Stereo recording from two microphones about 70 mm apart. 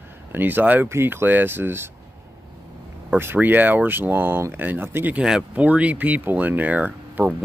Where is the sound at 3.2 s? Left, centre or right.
Right.